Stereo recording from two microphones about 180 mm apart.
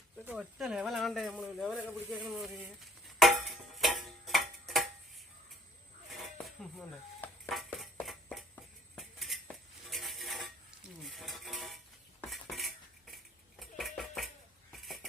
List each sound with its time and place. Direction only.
0.3 s a sound: 5° right (ahead or behind)
6.1 s dishes: centre (ahead or behind)
7.7 s a sound: centre (ahead or behind)
9.0 s dishes: centre (ahead or behind)
12.3 s cutlery: centre (ahead or behind)
13.6 s dishes: centre (ahead or behind)